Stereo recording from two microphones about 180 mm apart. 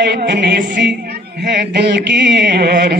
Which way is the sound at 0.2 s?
70° right (ahead or behind).